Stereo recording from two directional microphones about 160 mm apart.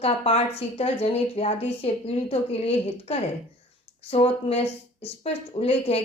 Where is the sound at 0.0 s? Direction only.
40° left (ahead or behind).